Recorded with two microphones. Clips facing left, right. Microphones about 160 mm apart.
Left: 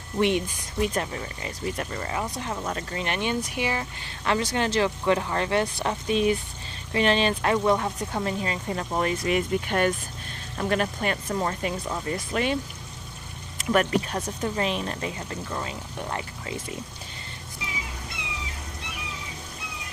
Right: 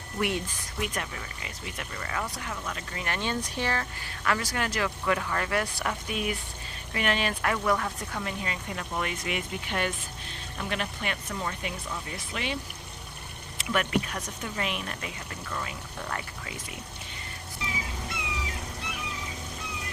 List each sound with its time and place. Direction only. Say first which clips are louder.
0.2 s speech: left 6 dB; 20° left (ahead or behind)
0.8 s speech: left 7 dB; 30° left (ahead or behind)
2.0 s speech: left 1 dB; 20° left (ahead or behind)
3.0 s speech: left 3 dB; 20° left (ahead or behind)
4.0 s speech: left 7 dB; 25° left (ahead or behind); by 12.5 s 45° left (ahead or behind)
13.6 s speech: left 5 dB; 40° left (ahead or behind)